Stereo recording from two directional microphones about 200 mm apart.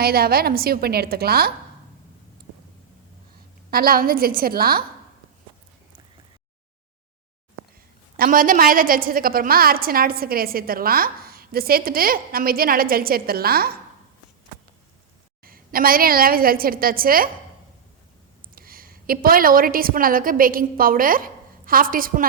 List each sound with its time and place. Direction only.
0.0 s a woman's voice: 50° right (ahead or behind)
3.7 s a woman's voice: 50° right (ahead or behind)
8.1 s a woman's voice: 45° right (ahead or behind)
15.4 s a woman's voice: 45° right (ahead or behind)
18.5 s a woman's voice: 45° right (ahead or behind)